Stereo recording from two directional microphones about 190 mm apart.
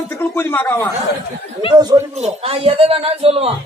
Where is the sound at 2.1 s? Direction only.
35° right (ahead or behind).